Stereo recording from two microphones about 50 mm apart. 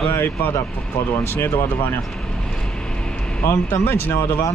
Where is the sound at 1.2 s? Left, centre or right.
Left.